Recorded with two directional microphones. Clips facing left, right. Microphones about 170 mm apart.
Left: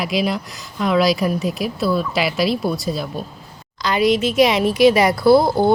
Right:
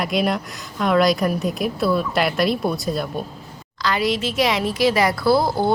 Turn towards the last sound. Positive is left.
turn(degrees=20)  # may be behind; listen again after turning